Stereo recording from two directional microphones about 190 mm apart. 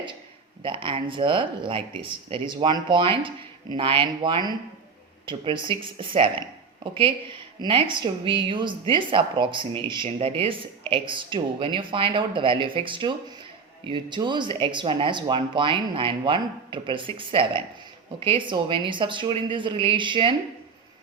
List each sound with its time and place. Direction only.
0.6 s speech: 25° right (ahead or behind)
7.6 s speech: 25° right (ahead or behind)